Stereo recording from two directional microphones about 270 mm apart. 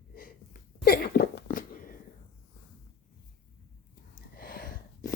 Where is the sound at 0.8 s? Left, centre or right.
Left.